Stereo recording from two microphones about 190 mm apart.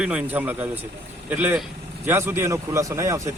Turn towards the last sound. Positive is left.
turn(degrees=-15)  # may be behind; listen again after turning